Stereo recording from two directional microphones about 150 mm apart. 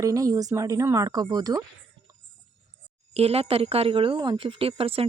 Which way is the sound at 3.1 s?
40° right (ahead or behind).